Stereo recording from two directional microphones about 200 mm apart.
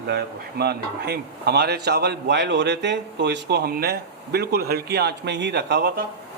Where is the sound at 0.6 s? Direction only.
55° right (ahead or behind).